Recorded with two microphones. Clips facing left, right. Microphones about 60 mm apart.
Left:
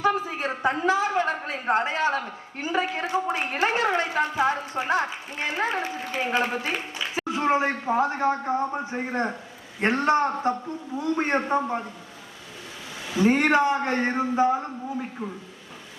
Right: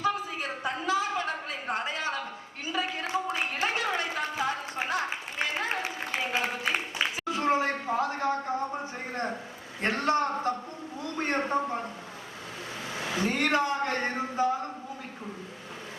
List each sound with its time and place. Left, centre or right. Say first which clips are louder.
0.0 s a woman's voice: left 5 dB; left
7.3 s a man's voice: left 4 dB; left
13.2 s speech: left 7 dB; left